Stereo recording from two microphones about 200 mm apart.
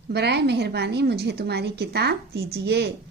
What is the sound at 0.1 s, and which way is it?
A woman's voice, 55° right (ahead or behind).